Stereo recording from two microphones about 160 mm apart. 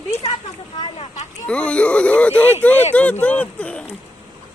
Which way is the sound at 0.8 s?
35° left (ahead or behind).